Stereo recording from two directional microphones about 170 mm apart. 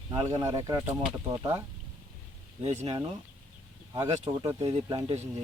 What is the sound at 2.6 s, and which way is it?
Speech, 40° right (ahead or behind).